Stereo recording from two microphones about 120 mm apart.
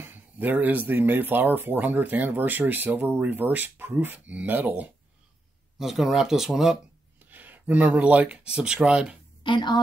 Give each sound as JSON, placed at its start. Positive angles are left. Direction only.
{"t": 0.0, "sound": "speech", "side_deg": -15}
{"t": 5.8, "sound": "speech", "side_deg": -5}
{"t": 7.2, "sound": "speech", "side_deg": -15}
{"t": 9.4, "sound": "a woman's voice", "side_deg": 40}